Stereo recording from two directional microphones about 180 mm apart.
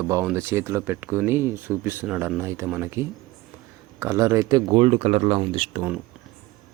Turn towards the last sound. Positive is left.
turn(degrees=-30)  # may be behind; listen again after turning